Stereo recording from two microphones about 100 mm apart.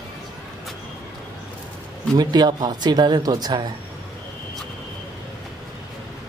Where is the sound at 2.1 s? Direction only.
45° right (ahead or behind).